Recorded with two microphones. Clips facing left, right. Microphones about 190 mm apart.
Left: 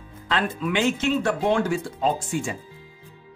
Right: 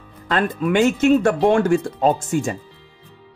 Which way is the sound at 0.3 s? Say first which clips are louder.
Right 6 dB; 50° right (ahead or behind).